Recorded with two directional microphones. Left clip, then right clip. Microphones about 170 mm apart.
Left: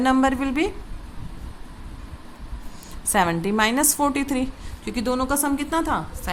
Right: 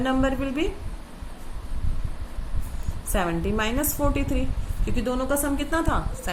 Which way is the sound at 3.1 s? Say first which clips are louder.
Left 5 dB; 50° left (ahead or behind).